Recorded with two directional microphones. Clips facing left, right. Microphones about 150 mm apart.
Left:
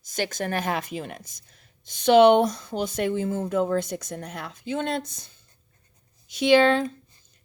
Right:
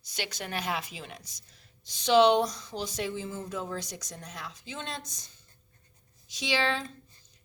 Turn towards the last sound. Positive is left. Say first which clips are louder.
# left 12 dB
turn(degrees=55)  # may be behind; listen again after turning